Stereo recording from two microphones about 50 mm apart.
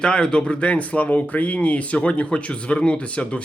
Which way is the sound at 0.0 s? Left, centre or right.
Centre.